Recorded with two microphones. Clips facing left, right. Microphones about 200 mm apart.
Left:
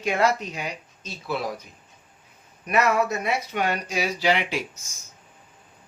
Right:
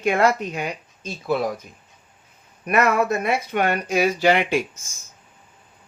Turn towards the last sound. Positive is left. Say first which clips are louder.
# right 5 dB
turn(degrees=-50)  # may be behind; listen again after turning